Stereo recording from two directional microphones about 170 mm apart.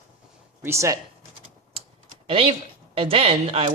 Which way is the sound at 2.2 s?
35° right (ahead or behind).